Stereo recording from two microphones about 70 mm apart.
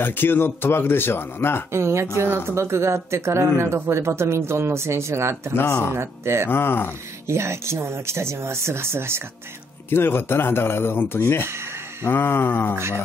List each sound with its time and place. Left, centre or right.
0.0 s speech: left
1.7 s speech: right
6.5 s speech: left
7.2 s speech: right
9.8 s speech: left